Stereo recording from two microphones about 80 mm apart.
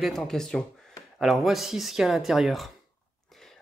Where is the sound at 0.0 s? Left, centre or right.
Centre.